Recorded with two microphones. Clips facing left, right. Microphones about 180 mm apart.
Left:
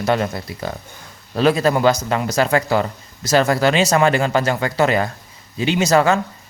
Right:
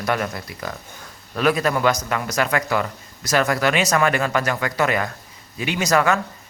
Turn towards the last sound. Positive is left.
turn(degrees=30)  # may be behind; listen again after turning